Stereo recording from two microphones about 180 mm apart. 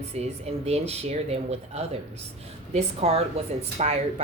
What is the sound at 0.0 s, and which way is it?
Speech, 35° right (ahead or behind).